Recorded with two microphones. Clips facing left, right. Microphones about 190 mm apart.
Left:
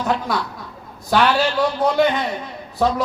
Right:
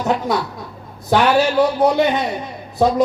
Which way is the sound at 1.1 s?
20° right (ahead or behind).